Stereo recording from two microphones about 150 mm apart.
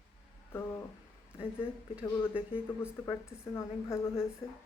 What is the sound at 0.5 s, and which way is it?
Speech, 15° left (ahead or behind).